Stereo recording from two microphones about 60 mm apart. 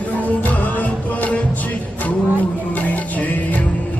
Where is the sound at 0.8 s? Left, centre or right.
Left.